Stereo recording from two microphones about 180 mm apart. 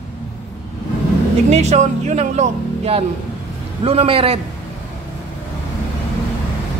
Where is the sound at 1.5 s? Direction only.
40° right (ahead or behind).